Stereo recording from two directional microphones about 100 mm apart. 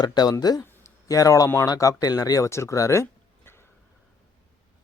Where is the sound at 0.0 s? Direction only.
45° left (ahead or behind); by 3.5 s 30° left (ahead or behind).